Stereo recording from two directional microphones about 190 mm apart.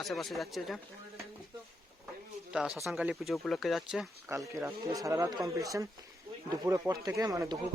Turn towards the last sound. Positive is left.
turn(degrees=-20)  # may be behind; listen again after turning